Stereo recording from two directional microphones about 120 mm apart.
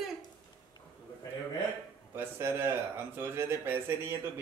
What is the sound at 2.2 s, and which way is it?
Speech, 20° right (ahead or behind).